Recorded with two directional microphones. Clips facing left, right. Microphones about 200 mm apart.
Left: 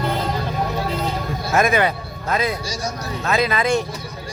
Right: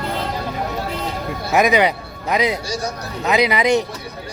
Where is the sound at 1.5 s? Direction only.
15° right (ahead or behind).